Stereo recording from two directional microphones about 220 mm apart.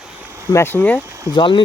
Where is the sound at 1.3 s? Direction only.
20° left (ahead or behind).